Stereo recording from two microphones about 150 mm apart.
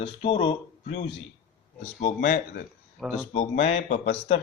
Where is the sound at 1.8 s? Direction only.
45° left (ahead or behind).